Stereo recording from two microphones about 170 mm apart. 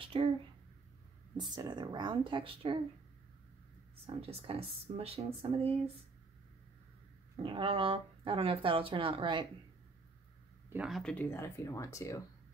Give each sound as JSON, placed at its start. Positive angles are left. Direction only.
{"t": 0.0, "sound": "a sound", "side_deg": -30}
{"t": 1.3, "sound": "speech", "side_deg": -25}
{"t": 4.0, "sound": "speech", "side_deg": -35}
{"t": 7.4, "sound": "speech", "side_deg": -30}
{"t": 10.7, "sound": "speech", "side_deg": -5}